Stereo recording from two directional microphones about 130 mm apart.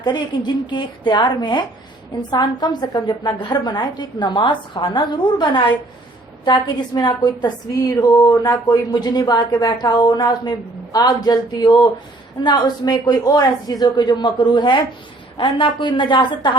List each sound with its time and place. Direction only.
0.0 s a woman's voice: 35° left (ahead or behind)